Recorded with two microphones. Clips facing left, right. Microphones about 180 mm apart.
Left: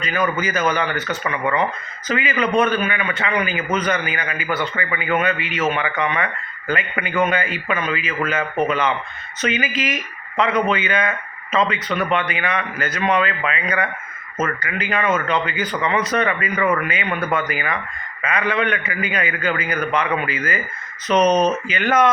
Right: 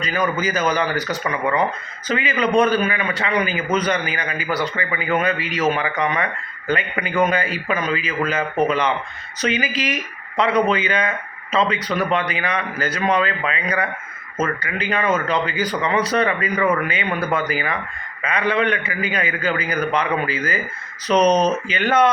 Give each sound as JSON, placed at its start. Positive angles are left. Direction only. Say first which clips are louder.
{"t": 0.7, "sound": "a man's voice", "louder": "right 1 dB", "side_deg": -35}